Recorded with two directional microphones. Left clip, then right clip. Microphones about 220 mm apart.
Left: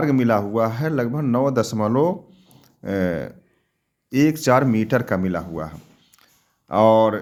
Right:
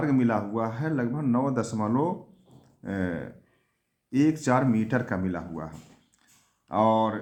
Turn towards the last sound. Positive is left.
turn(degrees=45)  # may be behind; listen again after turning